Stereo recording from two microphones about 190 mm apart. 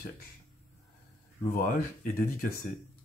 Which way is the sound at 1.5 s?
50° left (ahead or behind).